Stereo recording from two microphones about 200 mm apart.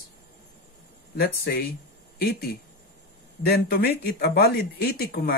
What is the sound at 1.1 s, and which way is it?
Speech, 50° left (ahead or behind).